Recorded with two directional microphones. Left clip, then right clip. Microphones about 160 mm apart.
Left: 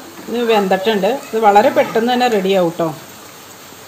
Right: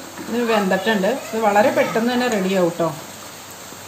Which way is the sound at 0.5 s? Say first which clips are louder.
Left 5 dB; 45° left (ahead or behind).